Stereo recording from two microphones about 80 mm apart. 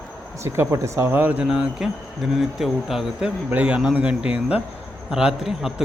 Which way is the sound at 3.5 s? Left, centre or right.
Centre.